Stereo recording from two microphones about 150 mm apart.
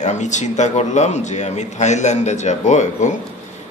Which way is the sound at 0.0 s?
50° left (ahead or behind).